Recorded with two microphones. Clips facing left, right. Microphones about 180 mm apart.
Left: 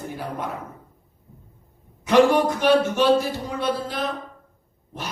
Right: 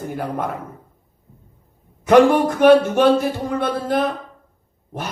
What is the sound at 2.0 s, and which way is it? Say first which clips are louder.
A man's voice: right 4 dB; 55° right (ahead or behind).